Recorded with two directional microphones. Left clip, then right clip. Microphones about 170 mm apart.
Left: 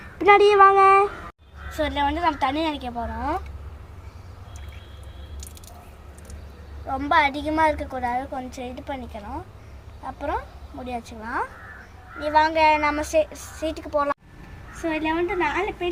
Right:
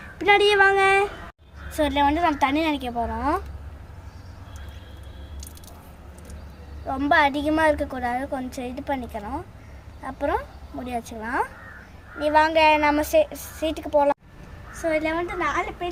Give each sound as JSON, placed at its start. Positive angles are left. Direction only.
{"t": 0.2, "sound": "speech", "side_deg": 10}
{"t": 1.7, "sound": "a woman's voice", "side_deg": -35}
{"t": 6.8, "sound": "a woman's voice", "side_deg": -25}
{"t": 14.8, "sound": "a woman's voice", "side_deg": -15}